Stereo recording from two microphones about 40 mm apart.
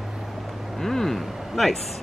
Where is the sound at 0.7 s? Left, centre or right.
Centre.